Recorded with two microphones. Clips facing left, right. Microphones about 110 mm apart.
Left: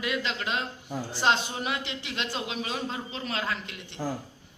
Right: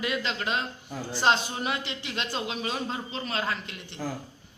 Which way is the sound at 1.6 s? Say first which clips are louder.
Right 1 dB; 10° left (ahead or behind).